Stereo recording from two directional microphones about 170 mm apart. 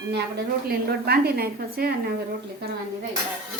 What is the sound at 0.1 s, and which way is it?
A woman's voice, 70° right (ahead or behind).